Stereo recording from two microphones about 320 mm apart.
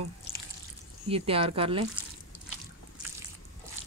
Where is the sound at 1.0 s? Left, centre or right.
Centre.